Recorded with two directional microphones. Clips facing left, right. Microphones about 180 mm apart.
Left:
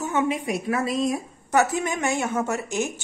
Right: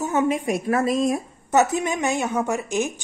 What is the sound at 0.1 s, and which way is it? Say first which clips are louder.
A woman's voice: right 2 dB; 45° right (ahead or behind).